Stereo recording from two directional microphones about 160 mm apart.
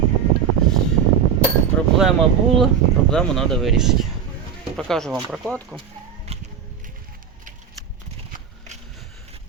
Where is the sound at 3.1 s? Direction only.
5° left (ahead or behind).